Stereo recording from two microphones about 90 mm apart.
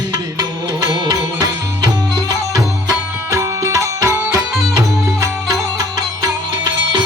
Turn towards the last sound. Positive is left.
turn(degrees=-40)  # may be behind; listen again after turning